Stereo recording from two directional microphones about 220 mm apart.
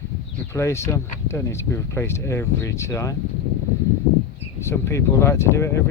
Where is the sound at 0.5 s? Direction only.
15° left (ahead or behind).